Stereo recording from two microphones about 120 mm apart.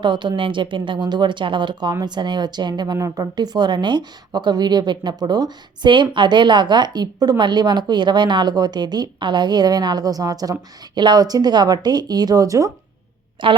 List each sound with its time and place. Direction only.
0.0 s a woman's voice: 40° right (ahead or behind)
13.4 s speech: 45° right (ahead or behind)